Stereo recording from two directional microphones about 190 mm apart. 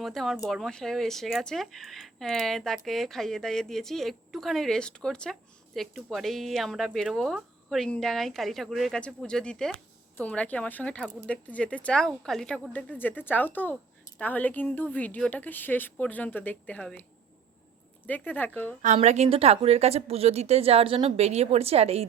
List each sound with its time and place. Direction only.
0.0 s speech: centre (ahead or behind)
18.9 s a woman's voice: 35° right (ahead or behind)